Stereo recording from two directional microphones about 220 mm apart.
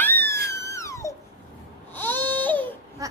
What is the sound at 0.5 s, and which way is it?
Wail, 15° left (ahead or behind).